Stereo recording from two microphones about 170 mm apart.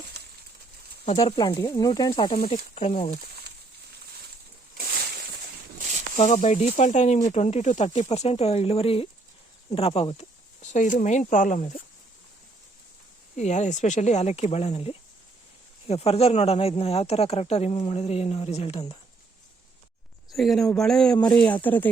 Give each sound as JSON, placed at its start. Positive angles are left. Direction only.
{"t": 1.0, "sound": "speech", "side_deg": 35}
{"t": 1.4, "sound": "speech", "side_deg": 20}
{"t": 2.5, "sound": "speech", "side_deg": 40}
{"t": 6.1, "sound": "speech", "side_deg": 40}
{"t": 13.3, "sound": "speech", "side_deg": 45}
{"t": 20.3, "sound": "speech", "side_deg": 0}